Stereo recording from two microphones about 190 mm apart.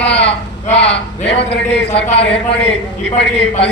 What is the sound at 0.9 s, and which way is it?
Speech, 65° left (ahead or behind).